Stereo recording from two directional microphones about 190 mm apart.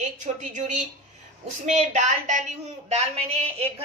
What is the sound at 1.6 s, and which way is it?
A woman's voice, 40° right (ahead or behind).